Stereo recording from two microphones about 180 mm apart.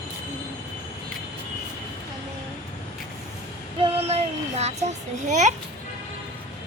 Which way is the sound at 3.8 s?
35° right (ahead or behind).